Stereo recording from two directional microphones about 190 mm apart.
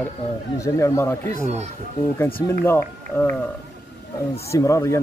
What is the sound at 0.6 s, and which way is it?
Speech, 15° left (ahead or behind).